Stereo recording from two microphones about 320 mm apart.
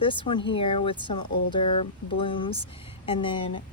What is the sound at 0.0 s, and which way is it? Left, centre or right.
Speech, centre.